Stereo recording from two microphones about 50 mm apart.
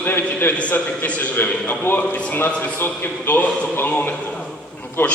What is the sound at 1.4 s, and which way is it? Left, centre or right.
Speech, left.